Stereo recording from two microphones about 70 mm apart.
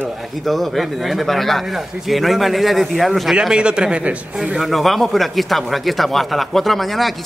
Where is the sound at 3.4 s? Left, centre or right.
Centre.